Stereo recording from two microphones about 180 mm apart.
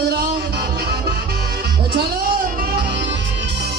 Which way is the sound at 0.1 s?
60° right (ahead or behind).